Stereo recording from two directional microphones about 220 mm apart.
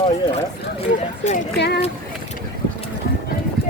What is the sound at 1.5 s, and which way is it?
Speech, 50° left (ahead or behind).